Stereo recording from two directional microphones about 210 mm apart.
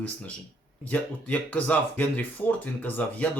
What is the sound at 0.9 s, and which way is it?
Speech, 10° left (ahead or behind).